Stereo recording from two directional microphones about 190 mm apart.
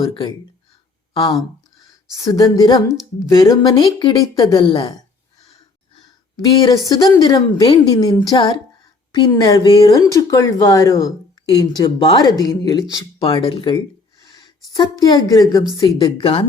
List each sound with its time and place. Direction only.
0.0 s speech: 25° left (ahead or behind)
2.1 s speech: 20° left (ahead or behind)
14.2 s a sound: 20° left (ahead or behind)
14.7 s speech: 20° left (ahead or behind)